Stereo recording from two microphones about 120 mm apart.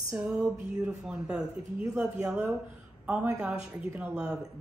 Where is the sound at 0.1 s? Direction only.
5° right (ahead or behind).